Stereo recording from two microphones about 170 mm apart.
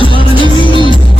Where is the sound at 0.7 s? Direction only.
30° right (ahead or behind).